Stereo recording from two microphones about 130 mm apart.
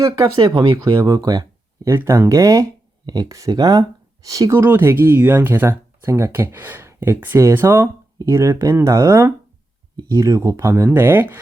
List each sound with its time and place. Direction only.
0.0 s speech: 30° right (ahead or behind)